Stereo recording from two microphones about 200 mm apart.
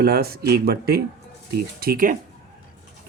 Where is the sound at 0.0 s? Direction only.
50° right (ahead or behind).